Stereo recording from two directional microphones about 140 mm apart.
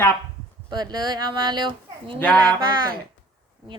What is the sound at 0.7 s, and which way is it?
Speech, 30° right (ahead or behind).